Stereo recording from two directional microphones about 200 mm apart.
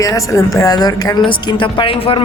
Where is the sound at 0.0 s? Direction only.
15° left (ahead or behind).